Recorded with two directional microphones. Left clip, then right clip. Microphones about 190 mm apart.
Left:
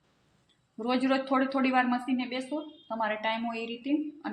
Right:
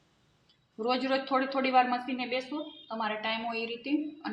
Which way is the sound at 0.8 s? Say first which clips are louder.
Left 1 dB; 35° left (ahead or behind).